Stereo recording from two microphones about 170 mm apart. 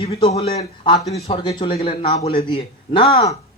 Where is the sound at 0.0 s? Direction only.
35° left (ahead or behind).